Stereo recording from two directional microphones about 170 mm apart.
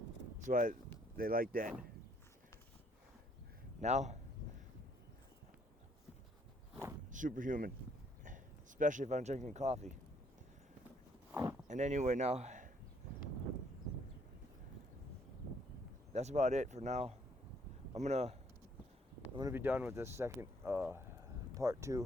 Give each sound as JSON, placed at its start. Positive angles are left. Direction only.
{"t": 0.3, "sound": "speech", "side_deg": -50}
{"t": 3.8, "sound": "speech", "side_deg": -40}
{"t": 7.1, "sound": "speech", "side_deg": -50}
{"t": 8.8, "sound": "speech", "side_deg": -50}
{"t": 11.3, "sound": "a sound", "side_deg": -10}
{"t": 11.7, "sound": "speech", "side_deg": -45}
{"t": 16.1, "sound": "speech", "side_deg": -40}
{"t": 19.4, "sound": "speech", "side_deg": -15}